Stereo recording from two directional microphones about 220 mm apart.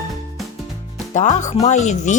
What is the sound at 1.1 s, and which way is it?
Speech, 35° left (ahead or behind).